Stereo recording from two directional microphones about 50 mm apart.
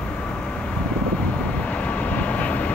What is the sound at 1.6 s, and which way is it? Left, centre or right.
Vehicle, left.